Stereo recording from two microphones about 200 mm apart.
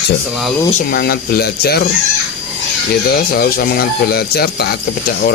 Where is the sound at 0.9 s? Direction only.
50° left (ahead or behind).